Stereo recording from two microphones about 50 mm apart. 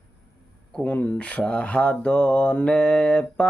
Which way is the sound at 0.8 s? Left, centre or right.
Left.